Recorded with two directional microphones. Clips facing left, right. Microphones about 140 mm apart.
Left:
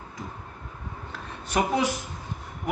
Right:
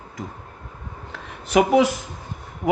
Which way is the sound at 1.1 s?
90° right.